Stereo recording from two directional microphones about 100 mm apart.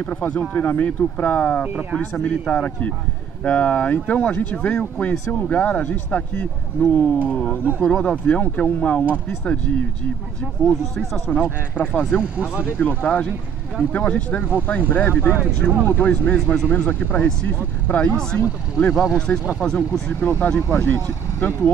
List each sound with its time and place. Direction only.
0.0 s speech: 15° left (ahead or behind)
10.6 s speech: 5° left (ahead or behind)
12.2 s speech: 10° right (ahead or behind)
12.7 s speech: 15° left (ahead or behind)
20.1 s speech: 15° left (ahead or behind)